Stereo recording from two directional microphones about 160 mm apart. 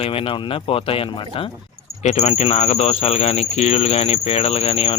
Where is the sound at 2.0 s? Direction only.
45° left (ahead or behind).